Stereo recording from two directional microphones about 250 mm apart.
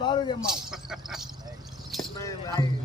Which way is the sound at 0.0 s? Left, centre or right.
Centre.